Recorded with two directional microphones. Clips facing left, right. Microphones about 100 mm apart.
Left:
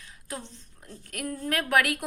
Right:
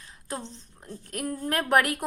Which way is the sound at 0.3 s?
30° right (ahead or behind).